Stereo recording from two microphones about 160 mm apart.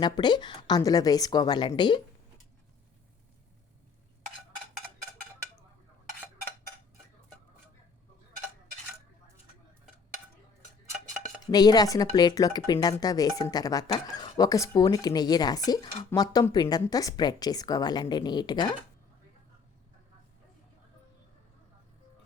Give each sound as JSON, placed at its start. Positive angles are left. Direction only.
{"t": 0.0, "sound": "speech", "side_deg": 25}
{"t": 11.5, "sound": "speech", "side_deg": 25}